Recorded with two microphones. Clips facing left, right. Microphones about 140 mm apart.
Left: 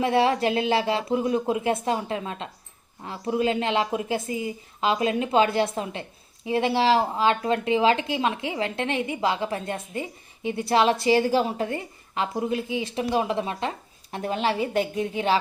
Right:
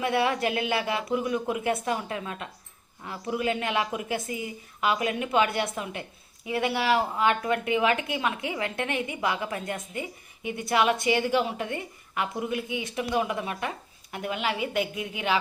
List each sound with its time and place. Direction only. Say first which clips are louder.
0.0 s a woman's voice: left 4 dB; 30° left (ahead or behind)